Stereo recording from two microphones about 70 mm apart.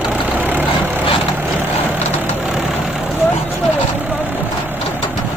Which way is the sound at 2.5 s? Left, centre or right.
Centre.